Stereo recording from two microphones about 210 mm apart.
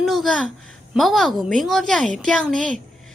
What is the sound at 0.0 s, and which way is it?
A woman's voice, centre (ahead or behind).